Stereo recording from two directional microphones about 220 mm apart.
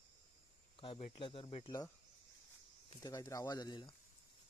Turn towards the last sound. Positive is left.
turn(degrees=20)  # may be behind; listen again after turning